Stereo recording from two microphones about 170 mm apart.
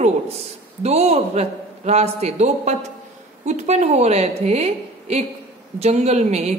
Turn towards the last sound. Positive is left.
turn(degrees=-40)  # may be behind; listen again after turning